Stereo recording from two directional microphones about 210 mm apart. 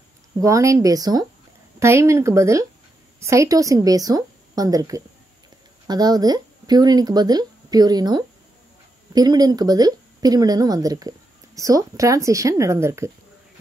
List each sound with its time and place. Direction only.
0.4 s a woman's voice: 15° right (ahead or behind)